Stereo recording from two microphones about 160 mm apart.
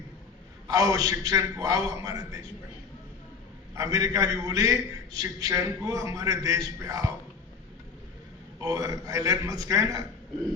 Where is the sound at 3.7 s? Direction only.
20° right (ahead or behind).